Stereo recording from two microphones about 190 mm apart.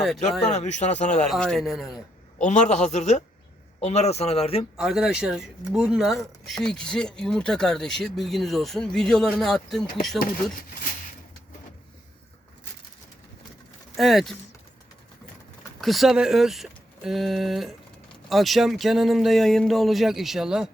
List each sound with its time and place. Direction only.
0.5 s a man's voice: 35° left (ahead or behind)
1.3 s speech: centre (ahead or behind)
2.4 s a man's voice: 40° left (ahead or behind)
4.8 s speech: 5° right (ahead or behind)
13.9 s speech: centre (ahead or behind)
15.8 s speech: centre (ahead or behind)